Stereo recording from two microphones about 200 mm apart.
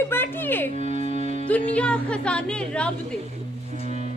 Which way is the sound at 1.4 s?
5° left (ahead or behind).